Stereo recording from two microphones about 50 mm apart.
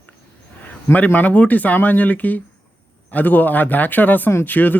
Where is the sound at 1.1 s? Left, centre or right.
Left.